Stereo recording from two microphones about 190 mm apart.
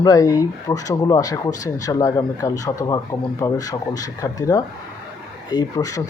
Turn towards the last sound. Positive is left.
turn(degrees=20)  # may be behind; listen again after turning